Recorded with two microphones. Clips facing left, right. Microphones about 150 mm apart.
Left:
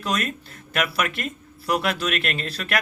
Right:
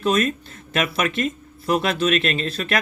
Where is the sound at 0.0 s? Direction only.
25° right (ahead or behind).